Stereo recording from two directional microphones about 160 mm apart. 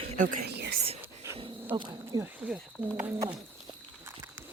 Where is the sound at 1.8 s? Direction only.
25° right (ahead or behind).